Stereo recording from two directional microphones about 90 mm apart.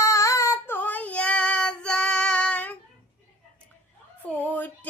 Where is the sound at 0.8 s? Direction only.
20° left (ahead or behind).